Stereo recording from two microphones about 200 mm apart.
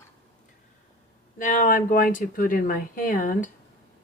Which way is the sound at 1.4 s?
40° left (ahead or behind).